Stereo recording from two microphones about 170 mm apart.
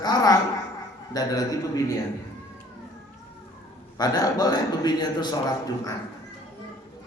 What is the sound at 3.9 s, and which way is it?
A man's voice, 25° left (ahead or behind).